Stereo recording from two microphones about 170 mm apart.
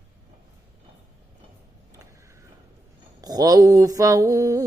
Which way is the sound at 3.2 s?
20° right (ahead or behind).